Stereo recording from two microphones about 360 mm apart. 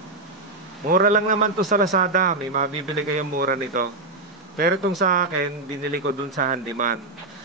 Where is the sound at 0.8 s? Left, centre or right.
Right.